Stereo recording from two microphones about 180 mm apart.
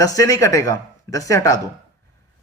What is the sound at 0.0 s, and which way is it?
Speech, 20° left (ahead or behind).